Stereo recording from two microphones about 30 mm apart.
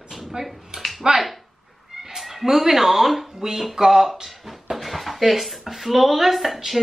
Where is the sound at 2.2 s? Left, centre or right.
Centre.